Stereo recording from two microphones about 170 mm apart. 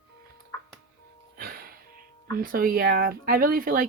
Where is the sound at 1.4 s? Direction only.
60° right (ahead or behind).